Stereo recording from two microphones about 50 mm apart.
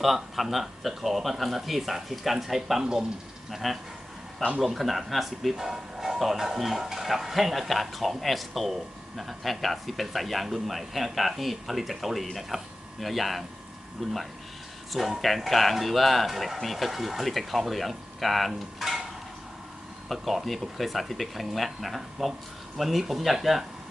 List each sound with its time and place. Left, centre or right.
0.0 s speech: centre
3.5 s speech: centre
20.1 s speech: centre